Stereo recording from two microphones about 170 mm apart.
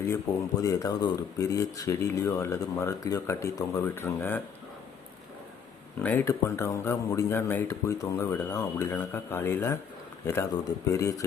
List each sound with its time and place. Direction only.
0.3 s speech: 20° left (ahead or behind)
6.0 s speech: 10° left (ahead or behind)